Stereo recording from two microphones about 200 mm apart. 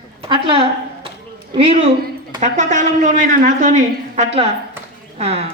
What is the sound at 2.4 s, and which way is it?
A woman's voice, 40° right (ahead or behind).